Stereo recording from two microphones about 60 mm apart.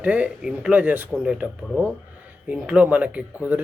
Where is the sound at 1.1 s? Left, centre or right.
Centre.